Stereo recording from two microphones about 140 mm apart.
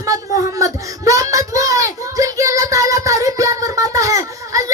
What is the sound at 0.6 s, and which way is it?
Child singing, 25° right (ahead or behind).